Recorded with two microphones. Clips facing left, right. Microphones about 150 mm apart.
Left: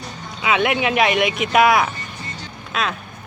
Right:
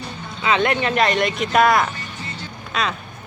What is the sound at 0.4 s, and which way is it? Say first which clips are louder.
A woman's voice: even; 5° left (ahead or behind).